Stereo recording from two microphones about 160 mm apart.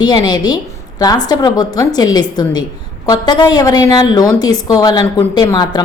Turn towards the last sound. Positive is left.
turn(degrees=25)  # may be behind; listen again after turning